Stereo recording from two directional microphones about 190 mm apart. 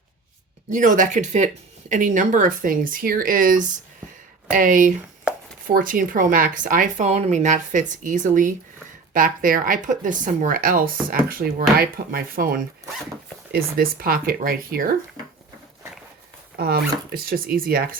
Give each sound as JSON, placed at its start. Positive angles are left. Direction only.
{"t": 0.7, "sound": "speech", "side_deg": -45}
{"t": 5.3, "sound": "chopping", "side_deg": -5}
{"t": 5.6, "sound": "speech", "side_deg": -45}
{"t": 15.2, "sound": "a sound", "side_deg": -20}
{"t": 16.6, "sound": "speech", "side_deg": -55}